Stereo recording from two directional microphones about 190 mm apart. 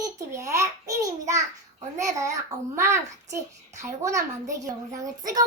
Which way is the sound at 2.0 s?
15° right (ahead or behind).